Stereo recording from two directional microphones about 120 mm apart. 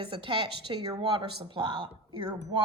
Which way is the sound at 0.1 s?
45° right (ahead or behind).